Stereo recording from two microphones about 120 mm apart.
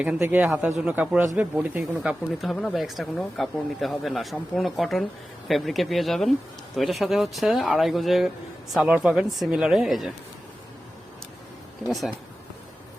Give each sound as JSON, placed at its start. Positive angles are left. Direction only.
{"t": 0.2, "sound": "speech", "side_deg": -15}
{"t": 2.4, "sound": "speech", "side_deg": 0}
{"t": 11.8, "sound": "speech", "side_deg": 0}